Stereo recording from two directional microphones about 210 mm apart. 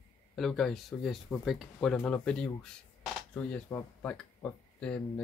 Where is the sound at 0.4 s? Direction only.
Centre (ahead or behind).